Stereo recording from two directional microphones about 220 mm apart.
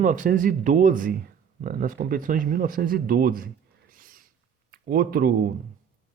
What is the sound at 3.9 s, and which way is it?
Owl, 40° right (ahead or behind).